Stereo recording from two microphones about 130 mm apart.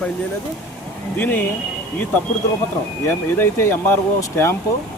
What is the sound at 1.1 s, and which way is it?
Speech, 15° left (ahead or behind).